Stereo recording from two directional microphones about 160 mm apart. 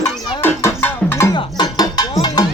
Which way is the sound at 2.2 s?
25° left (ahead or behind).